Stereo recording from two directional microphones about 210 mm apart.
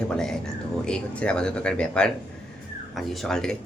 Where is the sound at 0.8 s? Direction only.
5° left (ahead or behind).